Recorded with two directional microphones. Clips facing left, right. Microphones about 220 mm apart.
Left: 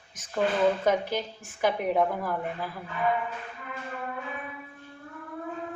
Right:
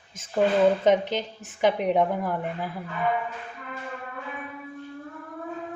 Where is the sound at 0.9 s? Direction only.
20° right (ahead or behind).